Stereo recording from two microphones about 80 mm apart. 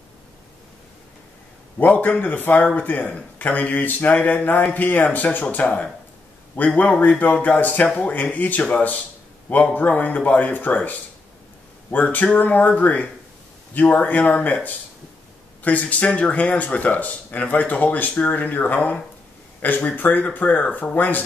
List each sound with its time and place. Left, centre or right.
1.8 s speech: left